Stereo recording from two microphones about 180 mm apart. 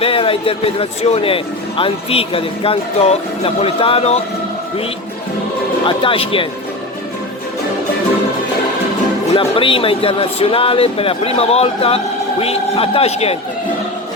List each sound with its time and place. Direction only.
0.0 s a man's voice: 30° left (ahead or behind)
5.8 s speech: 30° left (ahead or behind)
9.3 s a man's voice: 30° left (ahead or behind)